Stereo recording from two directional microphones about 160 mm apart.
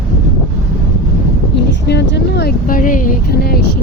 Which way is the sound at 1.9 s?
90° left.